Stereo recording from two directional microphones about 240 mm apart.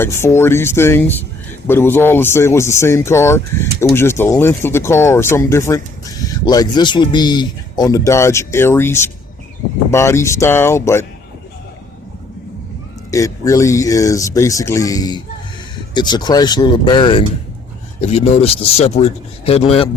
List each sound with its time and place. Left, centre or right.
0.0 s speech: centre
13.1 s speech: centre